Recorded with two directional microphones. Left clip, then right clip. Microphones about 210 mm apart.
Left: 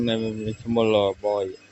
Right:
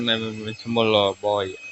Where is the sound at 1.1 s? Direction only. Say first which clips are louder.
Right 1 dB; 5° right (ahead or behind).